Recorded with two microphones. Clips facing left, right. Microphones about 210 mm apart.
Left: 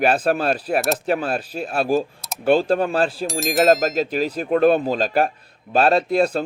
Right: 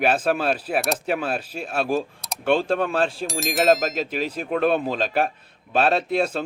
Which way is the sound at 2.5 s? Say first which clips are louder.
Left 3 dB; 35° left (ahead or behind).